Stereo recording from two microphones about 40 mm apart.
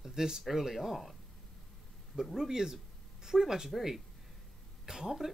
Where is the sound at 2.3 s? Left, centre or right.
Centre.